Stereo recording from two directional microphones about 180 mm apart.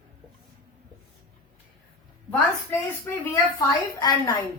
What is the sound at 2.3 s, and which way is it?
A woman's voice, 10° left (ahead or behind).